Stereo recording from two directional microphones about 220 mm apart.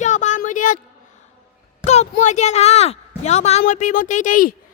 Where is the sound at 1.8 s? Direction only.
30° left (ahead or behind).